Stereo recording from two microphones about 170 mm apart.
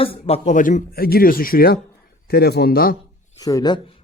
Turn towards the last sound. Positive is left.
turn(degrees=25)  # may be behind; listen again after turning